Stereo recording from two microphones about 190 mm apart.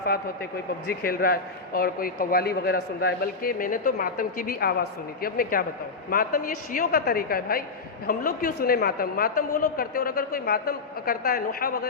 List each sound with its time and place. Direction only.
0.9 s speech: 50° left (ahead or behind)